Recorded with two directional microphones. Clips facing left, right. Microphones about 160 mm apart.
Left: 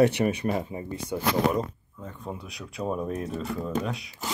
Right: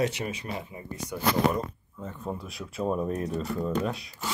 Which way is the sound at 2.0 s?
5° right (ahead or behind).